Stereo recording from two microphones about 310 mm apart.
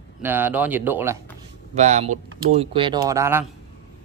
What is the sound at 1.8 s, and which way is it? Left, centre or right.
Speech, right.